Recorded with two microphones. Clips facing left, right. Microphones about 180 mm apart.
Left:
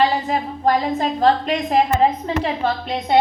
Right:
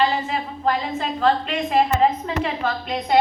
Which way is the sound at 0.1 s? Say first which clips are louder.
Left 3 dB; 40° left (ahead or behind).